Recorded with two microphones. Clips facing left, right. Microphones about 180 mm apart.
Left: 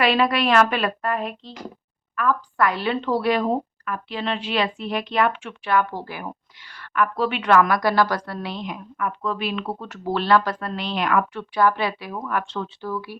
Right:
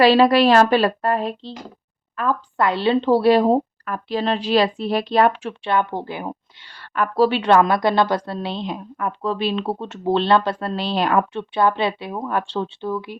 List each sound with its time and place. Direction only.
0.0 s a woman's voice: 35° right (ahead or behind)